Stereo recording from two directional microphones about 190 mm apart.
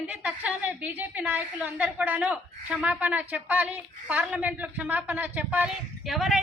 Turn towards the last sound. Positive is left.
turn(degrees=0)  # may be behind; listen again after turning